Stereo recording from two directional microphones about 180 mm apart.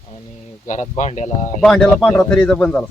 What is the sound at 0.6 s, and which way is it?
Speech, 40° left (ahead or behind).